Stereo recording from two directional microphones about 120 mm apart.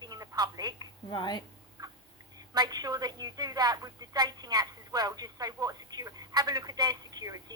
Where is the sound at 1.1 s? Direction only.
35° left (ahead or behind).